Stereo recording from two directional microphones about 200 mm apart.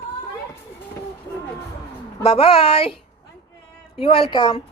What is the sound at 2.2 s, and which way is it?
Speech, 30° left (ahead or behind).